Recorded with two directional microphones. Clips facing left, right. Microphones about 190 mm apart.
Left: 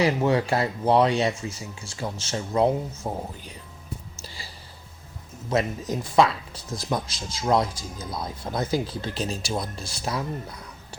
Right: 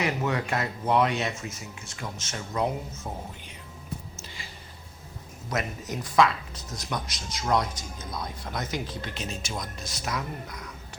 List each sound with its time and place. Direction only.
0.0 s speech: 30° left (ahead or behind)
4.2 s a sound: 35° left (ahead or behind)
5.5 s speech: 25° left (ahead or behind)